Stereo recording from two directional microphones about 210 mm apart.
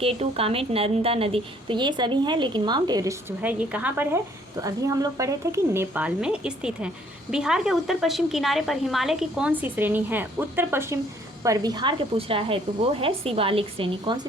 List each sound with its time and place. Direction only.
0.0 s a woman's voice: 25° right (ahead or behind)